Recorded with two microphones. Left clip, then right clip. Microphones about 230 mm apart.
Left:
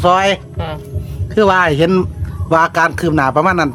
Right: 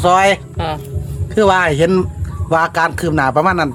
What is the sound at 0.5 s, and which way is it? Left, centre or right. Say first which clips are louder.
Music: right 4 dB; right.